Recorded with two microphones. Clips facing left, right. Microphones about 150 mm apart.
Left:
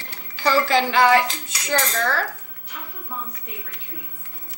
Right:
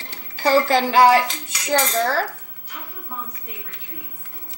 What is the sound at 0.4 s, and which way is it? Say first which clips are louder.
A woman's voice: right 2 dB; 40° right (ahead or behind).